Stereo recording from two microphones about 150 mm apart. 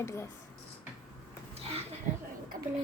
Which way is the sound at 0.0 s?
20° left (ahead or behind).